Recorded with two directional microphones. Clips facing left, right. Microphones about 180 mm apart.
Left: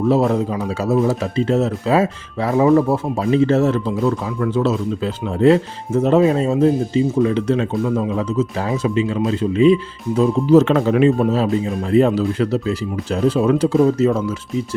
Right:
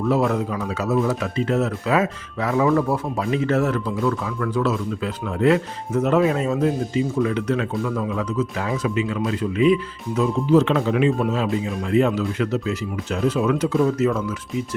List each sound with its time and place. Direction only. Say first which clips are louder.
0.3 s speech: left 4 dB; 30° left (ahead or behind)
10.6 s speech: left 5 dB; 45° left (ahead or behind)